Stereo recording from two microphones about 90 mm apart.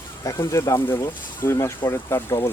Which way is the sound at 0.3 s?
35° left (ahead or behind).